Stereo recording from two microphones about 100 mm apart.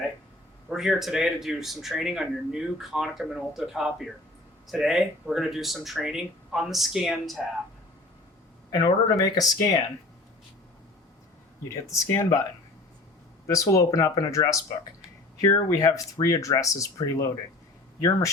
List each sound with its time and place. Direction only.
0.7 s speech: 5° right (ahead or behind)
8.8 s speech: 40° left (ahead or behind)
11.7 s speech: 30° left (ahead or behind)
13.5 s speech: 35° left (ahead or behind)